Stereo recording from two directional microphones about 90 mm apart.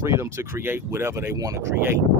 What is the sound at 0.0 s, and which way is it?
Speech, 30° right (ahead or behind).